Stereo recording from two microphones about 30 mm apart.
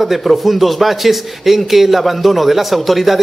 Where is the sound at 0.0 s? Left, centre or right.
Centre.